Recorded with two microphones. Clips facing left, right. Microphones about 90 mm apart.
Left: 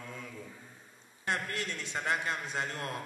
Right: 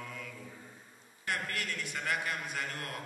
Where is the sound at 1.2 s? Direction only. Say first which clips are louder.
Left 2 dB; 25° left (ahead or behind).